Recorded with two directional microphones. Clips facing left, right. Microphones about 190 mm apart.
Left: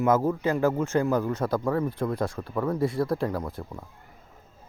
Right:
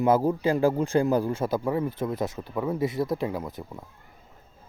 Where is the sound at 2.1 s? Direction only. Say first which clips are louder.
Even; 25° right (ahead or behind).